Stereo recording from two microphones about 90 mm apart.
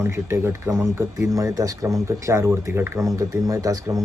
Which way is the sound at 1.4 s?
40° right (ahead or behind).